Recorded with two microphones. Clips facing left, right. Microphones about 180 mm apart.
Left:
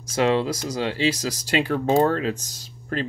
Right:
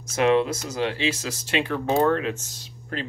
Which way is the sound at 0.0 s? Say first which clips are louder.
Right 1 dB; 30° left (ahead or behind).